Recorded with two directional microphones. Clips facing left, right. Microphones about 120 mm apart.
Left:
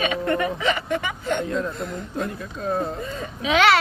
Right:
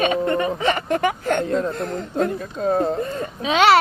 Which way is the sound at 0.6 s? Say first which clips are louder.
Right 4 dB; 45° right (ahead or behind).